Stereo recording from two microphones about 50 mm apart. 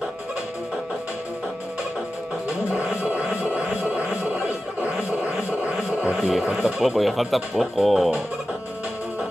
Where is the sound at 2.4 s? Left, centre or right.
Right.